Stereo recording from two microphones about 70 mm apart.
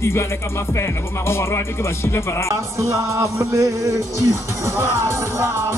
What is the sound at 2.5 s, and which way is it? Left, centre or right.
Music, right.